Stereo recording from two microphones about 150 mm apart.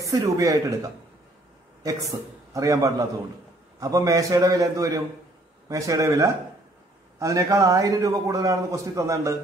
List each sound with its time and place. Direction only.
0.0 s a man's voice: 20° right (ahead or behind)